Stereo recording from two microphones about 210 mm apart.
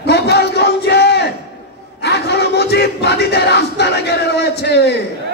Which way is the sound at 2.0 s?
50° left (ahead or behind).